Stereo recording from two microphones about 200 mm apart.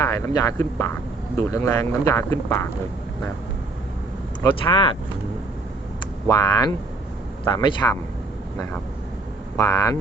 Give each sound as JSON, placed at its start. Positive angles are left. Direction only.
{"t": 0.0, "sound": "speech", "side_deg": 15}
{"t": 4.6, "sound": "speech", "side_deg": 25}
{"t": 6.2, "sound": "speech", "side_deg": 20}
{"t": 9.6, "sound": "speech", "side_deg": 15}